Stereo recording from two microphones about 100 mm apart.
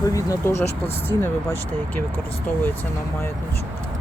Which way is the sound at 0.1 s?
30° left (ahead or behind).